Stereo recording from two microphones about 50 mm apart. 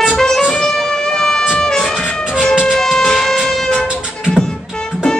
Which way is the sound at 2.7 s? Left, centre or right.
Centre.